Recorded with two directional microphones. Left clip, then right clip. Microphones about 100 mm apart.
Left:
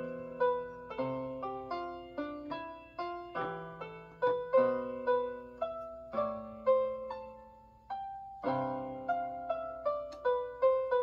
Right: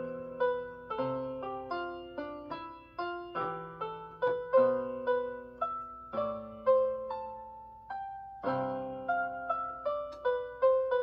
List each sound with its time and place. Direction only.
0.0 s music: 35° right (ahead or behind)
8.5 s music: 35° right (ahead or behind)
10.7 s music: 25° right (ahead or behind)